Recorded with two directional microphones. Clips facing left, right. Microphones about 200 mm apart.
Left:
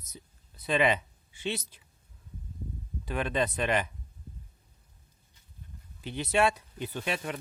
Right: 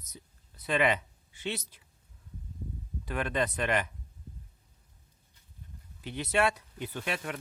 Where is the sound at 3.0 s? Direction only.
25° left (ahead or behind).